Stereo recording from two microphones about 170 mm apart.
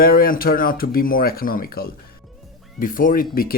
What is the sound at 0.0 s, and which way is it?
Speech, 60° left (ahead or behind).